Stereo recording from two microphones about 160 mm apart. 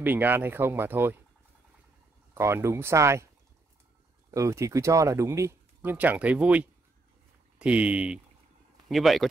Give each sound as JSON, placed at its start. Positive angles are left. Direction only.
{"t": 0.0, "sound": "speech", "side_deg": -10}
{"t": 2.3, "sound": "speech", "side_deg": -15}
{"t": 4.3, "sound": "speech", "side_deg": -20}